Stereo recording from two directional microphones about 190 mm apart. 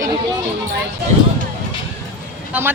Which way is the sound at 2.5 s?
10° right (ahead or behind).